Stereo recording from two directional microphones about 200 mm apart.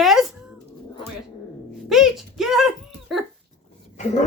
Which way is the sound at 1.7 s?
Centre (ahead or behind).